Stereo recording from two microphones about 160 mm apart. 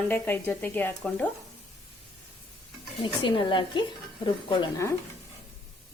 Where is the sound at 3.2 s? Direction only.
30° left (ahead or behind).